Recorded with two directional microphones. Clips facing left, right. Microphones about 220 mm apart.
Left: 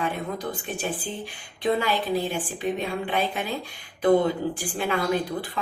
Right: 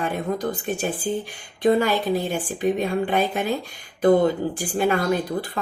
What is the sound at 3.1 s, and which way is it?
Speech, 45° right (ahead or behind).